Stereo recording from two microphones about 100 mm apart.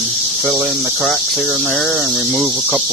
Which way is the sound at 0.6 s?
25° right (ahead or behind).